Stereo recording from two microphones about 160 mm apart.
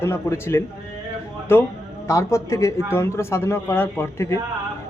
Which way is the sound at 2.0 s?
20° left (ahead or behind).